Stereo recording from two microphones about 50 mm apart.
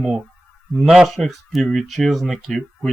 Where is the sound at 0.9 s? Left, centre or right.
Centre.